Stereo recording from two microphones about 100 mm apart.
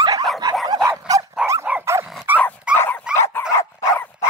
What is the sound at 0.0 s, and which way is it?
Dog, 40° right (ahead or behind).